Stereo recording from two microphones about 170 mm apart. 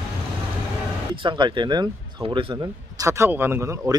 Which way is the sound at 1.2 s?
25° right (ahead or behind).